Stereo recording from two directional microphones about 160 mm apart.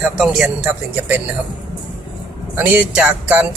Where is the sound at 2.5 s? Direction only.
10° right (ahead or behind).